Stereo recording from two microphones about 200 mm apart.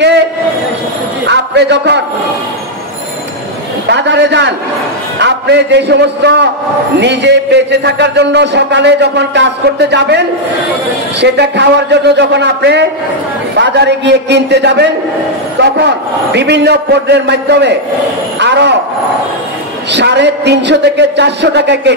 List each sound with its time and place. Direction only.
1.2 s a sound: 60° right (ahead or behind)
3.9 s a man's voice: 60° right (ahead or behind)
16.3 s a man's voice: 55° right (ahead or behind)
19.9 s a man's voice: 60° right (ahead or behind)